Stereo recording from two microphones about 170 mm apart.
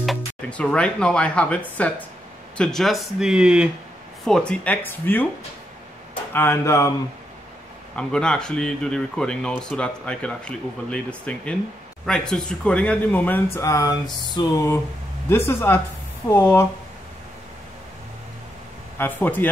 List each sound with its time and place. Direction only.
0.0 s speech: 5° left (ahead or behind)
6.3 s speech: 15° left (ahead or behind)
7.9 s speech: 5° left (ahead or behind)
18.9 s speech: 10° left (ahead or behind)